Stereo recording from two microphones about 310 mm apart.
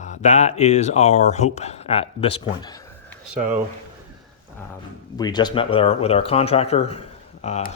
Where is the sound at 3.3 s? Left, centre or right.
Centre.